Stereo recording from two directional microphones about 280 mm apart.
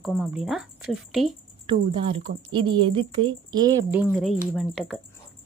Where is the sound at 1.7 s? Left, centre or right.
Centre.